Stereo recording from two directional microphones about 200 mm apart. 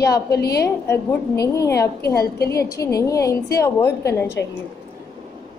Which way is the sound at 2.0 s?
50° left (ahead or behind).